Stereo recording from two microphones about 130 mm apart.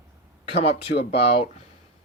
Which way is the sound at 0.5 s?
50° left (ahead or behind).